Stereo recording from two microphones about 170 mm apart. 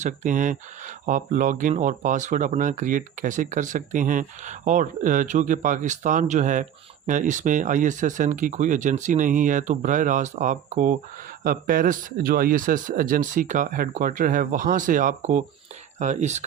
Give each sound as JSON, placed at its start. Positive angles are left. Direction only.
{"t": 0.0, "sound": "speech", "side_deg": -50}